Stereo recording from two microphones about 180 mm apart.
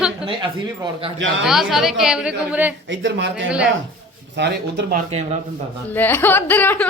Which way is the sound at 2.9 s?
90° right.